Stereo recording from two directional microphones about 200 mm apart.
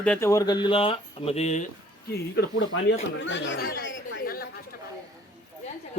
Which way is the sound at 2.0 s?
55° left (ahead or behind).